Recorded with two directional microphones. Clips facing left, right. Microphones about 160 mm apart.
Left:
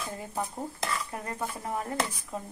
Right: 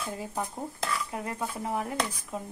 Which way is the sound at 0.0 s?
Centre (ahead or behind).